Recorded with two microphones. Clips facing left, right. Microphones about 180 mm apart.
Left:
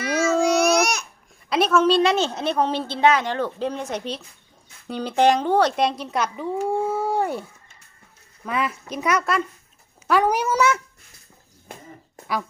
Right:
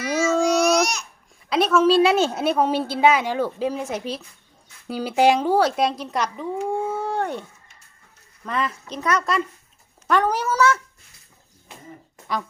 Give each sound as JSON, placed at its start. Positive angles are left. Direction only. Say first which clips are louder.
{"t": 0.5, "sound": "babbling", "louder": "even", "side_deg": 55}
{"t": 1.5, "sound": "a woman's voice", "louder": "right 1 dB", "side_deg": 0}
{"t": 8.4, "sound": "a woman's voice", "louder": "left 1 dB", "side_deg": 10}